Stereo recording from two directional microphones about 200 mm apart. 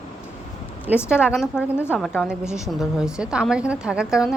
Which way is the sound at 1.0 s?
5° right (ahead or behind).